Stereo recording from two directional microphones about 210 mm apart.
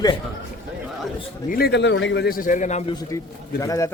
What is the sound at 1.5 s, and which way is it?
A man's voice, 50° left (ahead or behind).